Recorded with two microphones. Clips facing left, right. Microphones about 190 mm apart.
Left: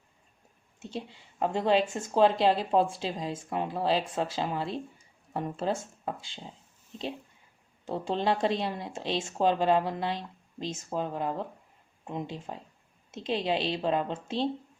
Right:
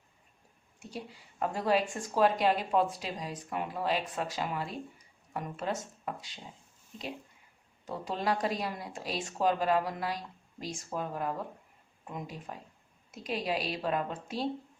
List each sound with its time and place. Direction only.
0.8 s speech: 25° left (ahead or behind)
7.9 s speech: 30° left (ahead or behind)